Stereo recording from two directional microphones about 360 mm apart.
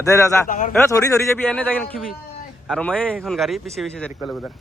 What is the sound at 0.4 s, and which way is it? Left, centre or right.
Speech, left.